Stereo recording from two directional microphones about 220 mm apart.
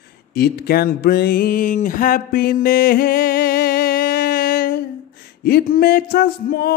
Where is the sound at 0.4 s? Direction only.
45° left (ahead or behind).